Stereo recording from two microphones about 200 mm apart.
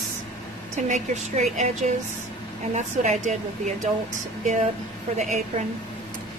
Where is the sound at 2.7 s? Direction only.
35° right (ahead or behind).